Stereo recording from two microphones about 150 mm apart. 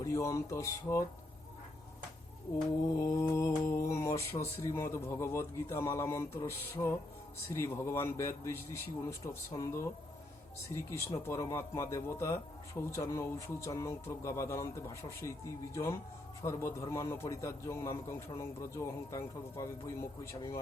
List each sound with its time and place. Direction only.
0.0 s speech: 20° left (ahead or behind)
3.0 s speech: 20° left (ahead or behind)